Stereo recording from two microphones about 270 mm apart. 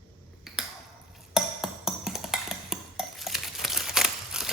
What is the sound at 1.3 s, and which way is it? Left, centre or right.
Music, centre.